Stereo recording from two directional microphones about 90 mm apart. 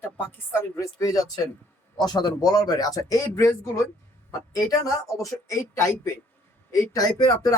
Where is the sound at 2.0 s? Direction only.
50° left (ahead or behind); by 3.8 s 30° left (ahead or behind).